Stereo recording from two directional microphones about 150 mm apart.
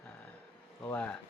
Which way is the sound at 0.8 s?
10° left (ahead or behind).